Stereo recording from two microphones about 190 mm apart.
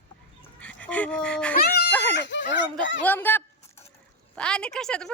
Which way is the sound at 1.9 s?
10° left (ahead or behind).